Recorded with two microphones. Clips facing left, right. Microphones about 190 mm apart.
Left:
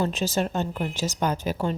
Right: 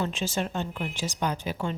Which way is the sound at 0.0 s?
40° left (ahead or behind).